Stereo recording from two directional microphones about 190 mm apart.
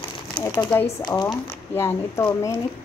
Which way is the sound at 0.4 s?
15° left (ahead or behind).